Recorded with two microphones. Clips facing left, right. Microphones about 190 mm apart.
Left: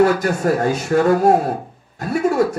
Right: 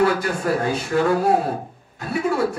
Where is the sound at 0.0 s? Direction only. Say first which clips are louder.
Left 4 dB; 45° left (ahead or behind).